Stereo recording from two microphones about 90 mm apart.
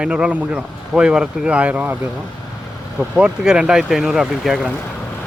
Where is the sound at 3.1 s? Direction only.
10° right (ahead or behind).